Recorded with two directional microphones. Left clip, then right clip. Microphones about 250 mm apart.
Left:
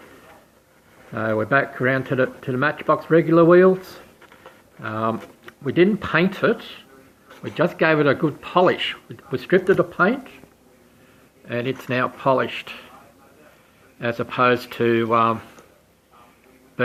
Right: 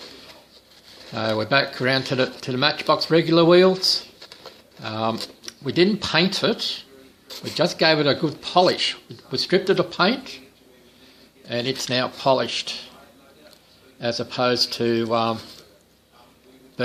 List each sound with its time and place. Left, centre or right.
1.1 s speech: centre
4.8 s speech: centre
11.4 s speech: centre
14.0 s speech: centre